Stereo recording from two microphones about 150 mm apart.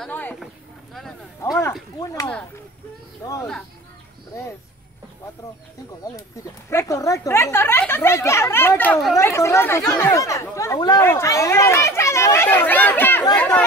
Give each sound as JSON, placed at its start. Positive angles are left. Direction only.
{"t": 0.0, "sound": "speech", "side_deg": 10}
{"t": 1.4, "sound": "speech", "side_deg": 20}
{"t": 6.7, "sound": "speech", "side_deg": 20}